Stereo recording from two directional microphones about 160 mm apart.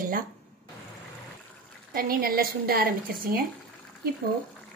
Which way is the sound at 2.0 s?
65° right (ahead or behind).